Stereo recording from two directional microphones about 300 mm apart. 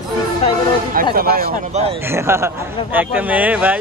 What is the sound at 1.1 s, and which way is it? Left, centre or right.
Speech, right.